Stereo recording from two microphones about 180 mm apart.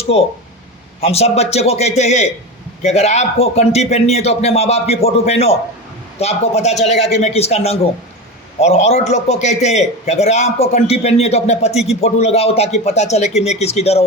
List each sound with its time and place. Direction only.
0.0 s a man's voice: 35° left (ahead or behind)